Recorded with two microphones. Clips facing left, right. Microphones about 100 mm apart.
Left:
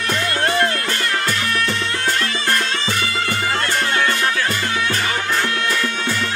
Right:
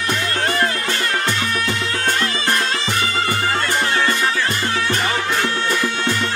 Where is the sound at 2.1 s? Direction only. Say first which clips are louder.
Right 1 dB; 10° right (ahead or behind).